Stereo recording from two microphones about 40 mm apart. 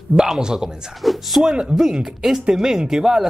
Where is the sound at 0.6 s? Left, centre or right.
Centre.